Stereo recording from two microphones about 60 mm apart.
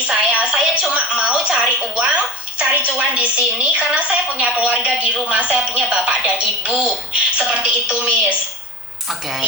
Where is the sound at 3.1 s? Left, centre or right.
Right.